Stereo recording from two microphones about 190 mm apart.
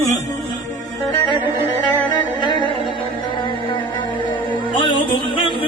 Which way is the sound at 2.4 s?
25° left (ahead or behind).